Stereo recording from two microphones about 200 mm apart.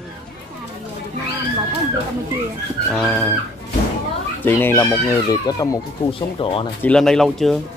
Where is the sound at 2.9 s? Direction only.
Centre (ahead or behind).